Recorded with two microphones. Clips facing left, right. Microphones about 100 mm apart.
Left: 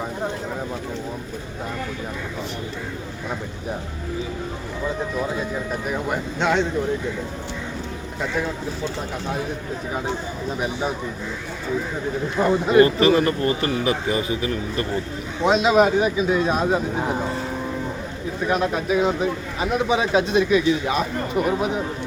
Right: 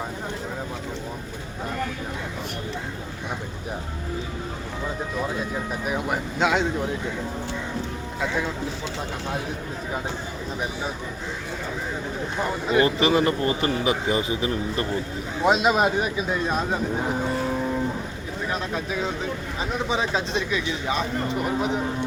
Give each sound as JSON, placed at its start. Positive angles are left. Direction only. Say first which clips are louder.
{"t": 5.8, "sound": "speech", "louder": "left 1 dB", "side_deg": -5}
{"t": 12.7, "sound": "speech", "louder": "left 4 dB", "side_deg": -20}
{"t": 15.4, "sound": "speech", "louder": "left 3 dB", "side_deg": -5}
{"t": 18.4, "sound": "speech", "louder": "left 7 dB", "side_deg": 15}